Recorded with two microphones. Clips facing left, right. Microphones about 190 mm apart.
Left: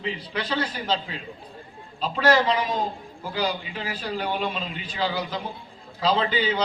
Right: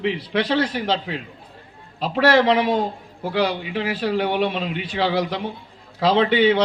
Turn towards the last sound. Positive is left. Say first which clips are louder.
# right 8 dB
turn(degrees=-70)  # may be behind; listen again after turning